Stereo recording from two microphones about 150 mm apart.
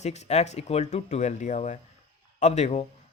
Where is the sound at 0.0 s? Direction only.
45° left (ahead or behind).